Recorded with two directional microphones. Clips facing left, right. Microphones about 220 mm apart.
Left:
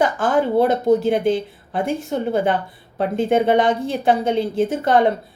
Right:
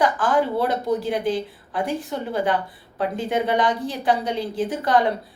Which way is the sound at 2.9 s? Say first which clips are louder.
Left 6 dB; 25° left (ahead or behind).